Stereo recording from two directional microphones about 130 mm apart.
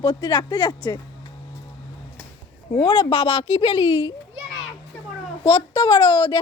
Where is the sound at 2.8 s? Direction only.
40° left (ahead or behind).